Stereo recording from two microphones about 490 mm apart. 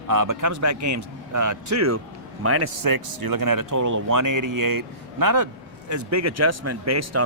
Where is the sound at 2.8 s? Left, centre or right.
Right.